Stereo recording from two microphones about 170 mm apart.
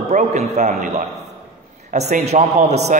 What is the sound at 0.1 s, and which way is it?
A man's voice, 45° right (ahead or behind).